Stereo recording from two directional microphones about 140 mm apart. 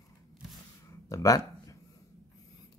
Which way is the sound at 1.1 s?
25° left (ahead or behind).